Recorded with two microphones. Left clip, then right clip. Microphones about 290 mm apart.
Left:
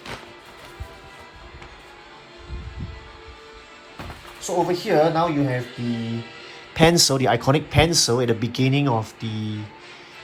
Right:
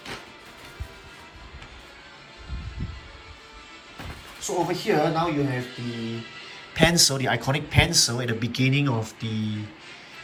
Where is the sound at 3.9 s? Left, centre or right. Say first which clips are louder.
Left 3 dB; centre.